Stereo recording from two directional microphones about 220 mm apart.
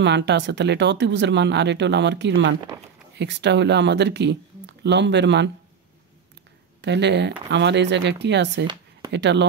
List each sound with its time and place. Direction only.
0.0 s speech: 50° right (ahead or behind)
6.8 s speech: 50° right (ahead or behind)